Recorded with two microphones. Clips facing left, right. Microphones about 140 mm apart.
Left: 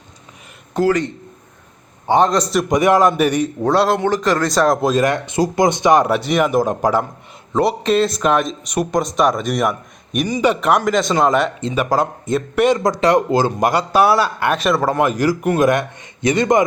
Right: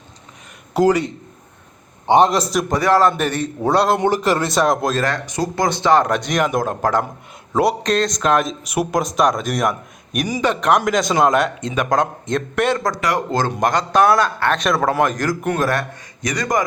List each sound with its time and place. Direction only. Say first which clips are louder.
0.7 s a man's voice: right 1 dB; 15° right (ahead or behind)
2.4 s speech: left 2 dB; centre (ahead or behind)
2.6 s a man's voice: left 2 dB; 15° left (ahead or behind)
3.6 s a man's voice: right 1 dB; centre (ahead or behind)
4.9 s a man's voice: left 5 dB; 20° left (ahead or behind)
12.9 s speech: left 6 dB; 25° left (ahead or behind)
13.5 s a man's voice: left 1 dB; 10° left (ahead or behind); by 16.6 s 25° left (ahead or behind)